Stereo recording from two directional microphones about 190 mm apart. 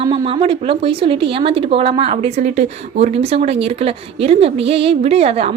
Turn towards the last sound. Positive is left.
turn(degrees=-35)  # may be behind; listen again after turning